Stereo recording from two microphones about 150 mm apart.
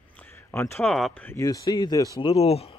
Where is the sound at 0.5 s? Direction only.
15° left (ahead or behind).